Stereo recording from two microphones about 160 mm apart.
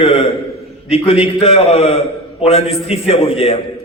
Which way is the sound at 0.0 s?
35° left (ahead or behind).